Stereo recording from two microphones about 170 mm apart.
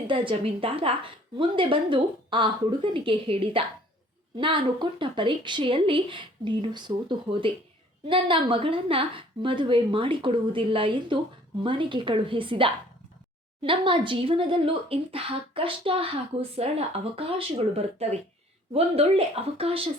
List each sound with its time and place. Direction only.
0.1 s speech: 30° right (ahead or behind)